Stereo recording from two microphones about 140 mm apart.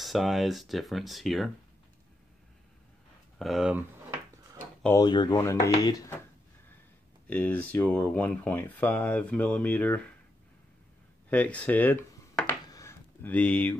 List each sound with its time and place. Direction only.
0.0 s speech: centre (ahead or behind)
3.3 s speech: centre (ahead or behind)
4.9 s speech: 30° left (ahead or behind)
7.2 s speech: 10° left (ahead or behind)
11.2 s a sound: 10° left (ahead or behind)
12.6 s a sound: 25° left (ahead or behind)
13.2 s speech: 10° left (ahead or behind)